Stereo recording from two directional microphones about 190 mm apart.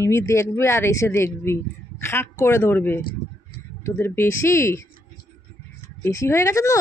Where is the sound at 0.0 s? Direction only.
15° left (ahead or behind).